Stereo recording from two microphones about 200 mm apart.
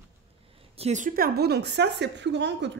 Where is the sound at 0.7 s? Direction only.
35° right (ahead or behind).